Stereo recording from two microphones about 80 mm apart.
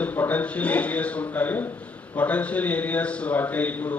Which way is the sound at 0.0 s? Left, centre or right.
Centre.